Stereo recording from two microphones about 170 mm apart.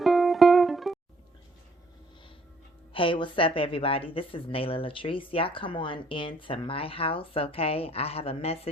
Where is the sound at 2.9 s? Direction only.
30° left (ahead or behind).